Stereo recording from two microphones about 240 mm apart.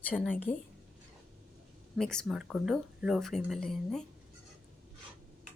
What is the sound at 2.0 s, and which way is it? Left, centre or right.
Speech, centre.